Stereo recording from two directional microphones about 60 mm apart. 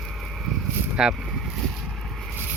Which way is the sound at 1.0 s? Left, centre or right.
Centre.